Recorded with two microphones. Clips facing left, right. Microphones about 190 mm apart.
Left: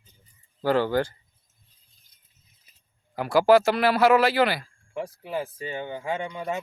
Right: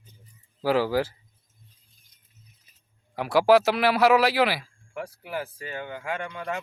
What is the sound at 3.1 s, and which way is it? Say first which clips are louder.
A man's voice: left 1 dB; centre (ahead or behind).